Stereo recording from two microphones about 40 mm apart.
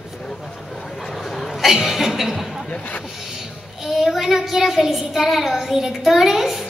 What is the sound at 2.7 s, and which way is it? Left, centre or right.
Speech, left.